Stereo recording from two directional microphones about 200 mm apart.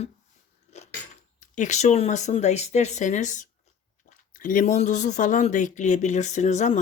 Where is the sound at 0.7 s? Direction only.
35° left (ahead or behind).